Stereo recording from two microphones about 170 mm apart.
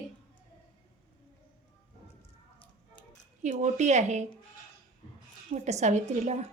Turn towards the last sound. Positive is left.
turn(degrees=-40)  # may be behind; listen again after turning